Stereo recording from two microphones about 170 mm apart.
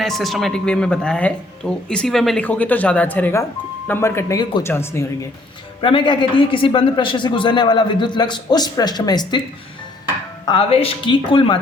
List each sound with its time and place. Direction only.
0.0 s speech: centre (ahead or behind)
5.8 s a man's voice: 30° left (ahead or behind)
10.4 s a man's voice: 30° left (ahead or behind)